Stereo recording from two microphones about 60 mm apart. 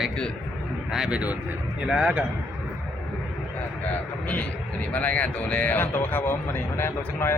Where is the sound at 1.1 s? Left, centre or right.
Right.